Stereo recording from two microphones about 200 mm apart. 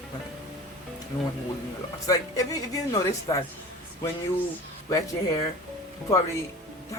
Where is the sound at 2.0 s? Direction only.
15° left (ahead or behind).